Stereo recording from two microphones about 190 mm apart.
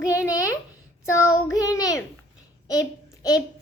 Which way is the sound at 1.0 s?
15° left (ahead or behind).